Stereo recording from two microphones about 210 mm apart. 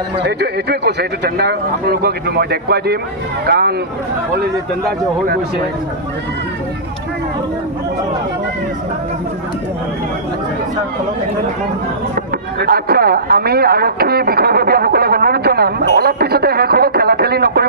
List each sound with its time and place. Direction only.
0.2 s speech: 50° right (ahead or behind)
12.5 s speech: 45° right (ahead or behind)